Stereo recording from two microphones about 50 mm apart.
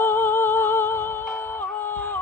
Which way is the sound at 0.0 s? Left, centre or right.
Left.